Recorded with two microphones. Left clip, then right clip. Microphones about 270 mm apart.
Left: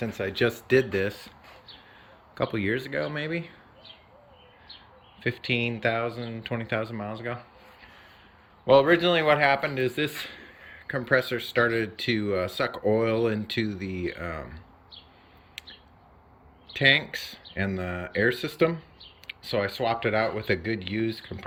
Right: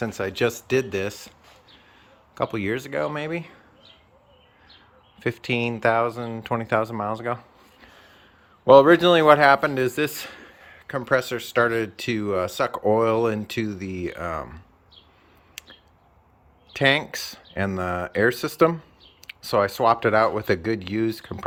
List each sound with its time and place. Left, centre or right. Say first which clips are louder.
0.0 s speech: right 3 dB; centre
0.9 s a sound: even; centre
2.4 s speech: right 2 dB; centre
5.2 s speech: right 2 dB; centre
7.3 s a sound: right 6 dB; right
8.6 s speech: right 6 dB; right
16.7 s speech: right 1 dB; centre